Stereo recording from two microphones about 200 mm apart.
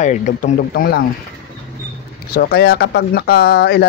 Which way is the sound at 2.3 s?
50° left (ahead or behind).